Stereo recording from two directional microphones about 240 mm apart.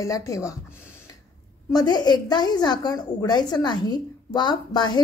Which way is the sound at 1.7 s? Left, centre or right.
Centre.